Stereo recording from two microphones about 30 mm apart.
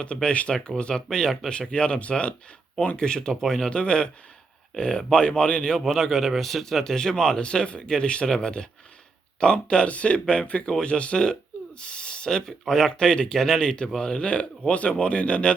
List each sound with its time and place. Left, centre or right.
0.0 s speech: left; by 1.4 s centre
1.5 s speech: left
3.0 s speech: left
3.4 s speech: centre
3.7 s speech: left
6.0 s speech: centre
6.9 s speech: centre
7.4 s speech: left
9.8 s speech: left
12.3 s speech: centre
14.0 s speech: left